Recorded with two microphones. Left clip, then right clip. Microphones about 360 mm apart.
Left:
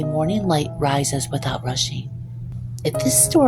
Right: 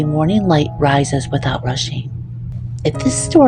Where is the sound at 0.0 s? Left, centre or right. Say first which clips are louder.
Right 5 dB; left.